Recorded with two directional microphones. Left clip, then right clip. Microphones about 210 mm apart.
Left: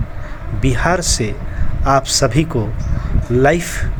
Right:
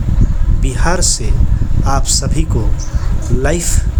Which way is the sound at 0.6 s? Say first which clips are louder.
Left 1 dB; 15° left (ahead or behind).